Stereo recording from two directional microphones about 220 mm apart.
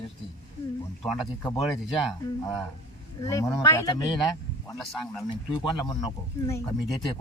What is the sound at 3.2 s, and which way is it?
Speech, 15° left (ahead or behind).